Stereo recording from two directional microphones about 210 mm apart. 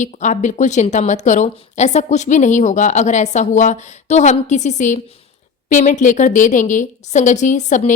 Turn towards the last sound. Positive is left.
turn(degrees=35)  # may be behind; listen again after turning